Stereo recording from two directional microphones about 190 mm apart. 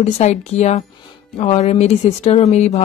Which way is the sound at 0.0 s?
35° left (ahead or behind).